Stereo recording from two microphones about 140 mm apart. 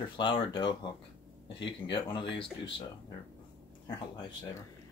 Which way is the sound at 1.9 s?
40° left (ahead or behind).